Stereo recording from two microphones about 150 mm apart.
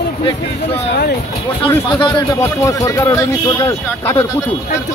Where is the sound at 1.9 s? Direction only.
30° left (ahead or behind).